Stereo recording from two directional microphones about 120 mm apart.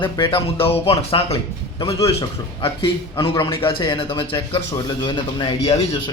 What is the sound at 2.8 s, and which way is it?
A man's voice, 45° left (ahead or behind).